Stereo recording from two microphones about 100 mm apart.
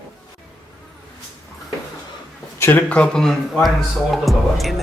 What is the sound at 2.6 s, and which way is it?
Speech, 25° left (ahead or behind).